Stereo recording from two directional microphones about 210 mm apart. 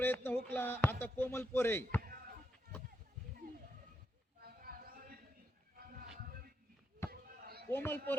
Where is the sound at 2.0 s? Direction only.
45° right (ahead or behind).